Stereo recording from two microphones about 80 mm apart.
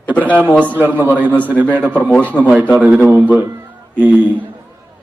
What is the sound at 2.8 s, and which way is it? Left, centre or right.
A man's voice, centre.